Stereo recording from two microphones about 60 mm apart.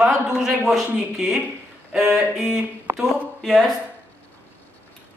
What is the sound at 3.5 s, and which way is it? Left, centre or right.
Speech, centre.